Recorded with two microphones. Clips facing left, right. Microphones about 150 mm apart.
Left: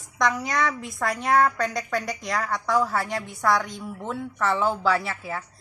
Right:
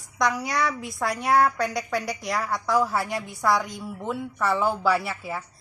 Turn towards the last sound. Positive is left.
turn(degrees=-10)  # may be behind; listen again after turning